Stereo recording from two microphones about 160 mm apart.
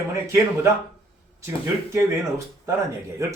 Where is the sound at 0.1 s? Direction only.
15° right (ahead or behind).